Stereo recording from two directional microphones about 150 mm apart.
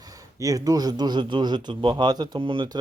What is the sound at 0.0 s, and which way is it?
Speech, 25° right (ahead or behind).